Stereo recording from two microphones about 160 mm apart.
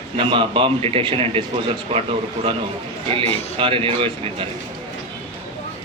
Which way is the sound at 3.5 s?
35° right (ahead or behind).